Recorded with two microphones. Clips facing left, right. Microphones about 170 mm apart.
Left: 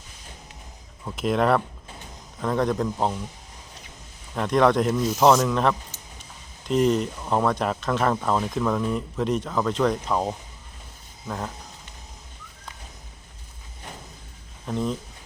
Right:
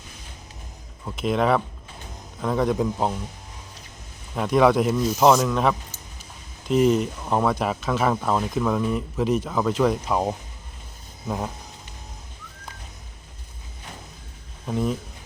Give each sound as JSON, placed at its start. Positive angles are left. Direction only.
{"t": 1.0, "sound": "speech", "side_deg": 0}
{"t": 4.4, "sound": "speech", "side_deg": -5}
{"t": 14.7, "sound": "speech", "side_deg": -10}